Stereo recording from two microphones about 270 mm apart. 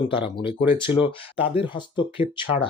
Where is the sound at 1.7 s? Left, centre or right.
Centre.